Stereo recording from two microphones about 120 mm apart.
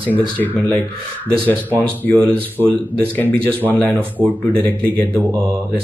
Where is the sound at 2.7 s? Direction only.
15° left (ahead or behind).